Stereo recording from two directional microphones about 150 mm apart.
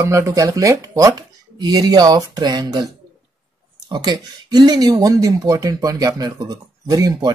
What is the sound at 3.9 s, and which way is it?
Speech, 25° right (ahead or behind).